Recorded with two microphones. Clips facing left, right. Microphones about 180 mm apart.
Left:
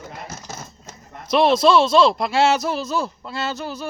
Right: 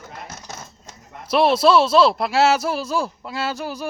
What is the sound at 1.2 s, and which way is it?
Speech, 5° right (ahead or behind).